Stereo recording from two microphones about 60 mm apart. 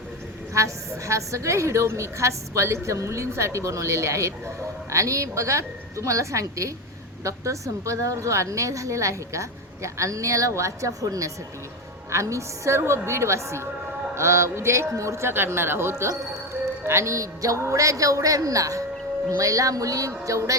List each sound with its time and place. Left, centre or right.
0.5 s a woman's voice: right